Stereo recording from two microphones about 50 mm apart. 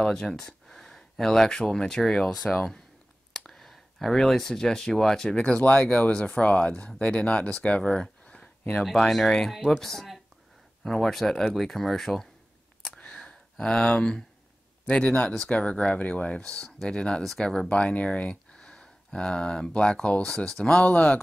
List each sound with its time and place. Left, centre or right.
0.0 s speech: centre
5.3 s speech: left
9.0 s speech: centre
13.0 s a sound: left
13.6 s speech: centre
17.6 s speech: left
20.8 s speech: left